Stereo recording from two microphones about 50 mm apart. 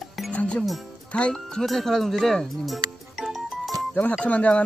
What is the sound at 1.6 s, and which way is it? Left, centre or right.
Speech, centre.